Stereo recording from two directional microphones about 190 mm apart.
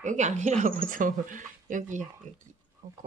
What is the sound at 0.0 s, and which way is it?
Speech, 40° right (ahead or behind).